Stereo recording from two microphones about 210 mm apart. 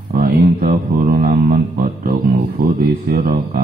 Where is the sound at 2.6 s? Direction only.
45° right (ahead or behind).